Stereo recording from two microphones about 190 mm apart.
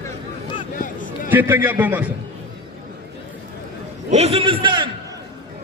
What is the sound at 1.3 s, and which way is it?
Speech, 10° right (ahead or behind).